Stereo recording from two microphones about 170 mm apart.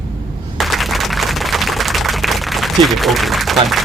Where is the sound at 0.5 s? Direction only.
Centre (ahead or behind).